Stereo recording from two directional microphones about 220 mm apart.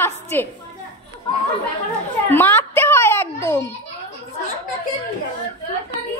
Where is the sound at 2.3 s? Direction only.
10° left (ahead or behind).